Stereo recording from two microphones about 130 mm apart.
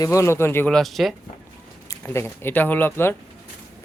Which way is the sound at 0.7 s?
5° left (ahead or behind).